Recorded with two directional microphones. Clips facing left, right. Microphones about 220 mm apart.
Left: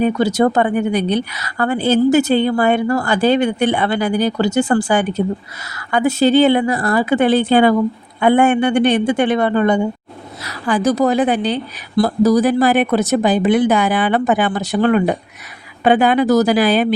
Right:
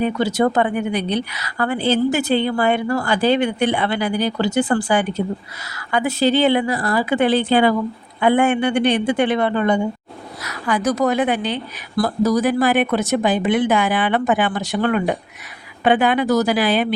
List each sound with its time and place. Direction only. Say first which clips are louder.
0.0 s speech: left 3 dB; 45° left (ahead or behind)
10.4 s a woman's voice: left 4 dB; 30° left (ahead or behind)